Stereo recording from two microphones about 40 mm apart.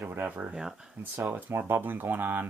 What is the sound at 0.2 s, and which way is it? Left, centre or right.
Speech, right.